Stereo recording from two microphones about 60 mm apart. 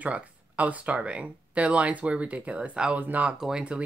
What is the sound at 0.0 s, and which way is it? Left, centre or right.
Speech, right.